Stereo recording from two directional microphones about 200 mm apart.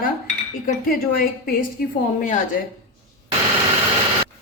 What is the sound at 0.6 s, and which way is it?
A woman's voice, 45° left (ahead or behind).